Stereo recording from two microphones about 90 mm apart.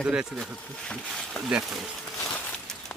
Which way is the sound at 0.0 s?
5° right (ahead or behind).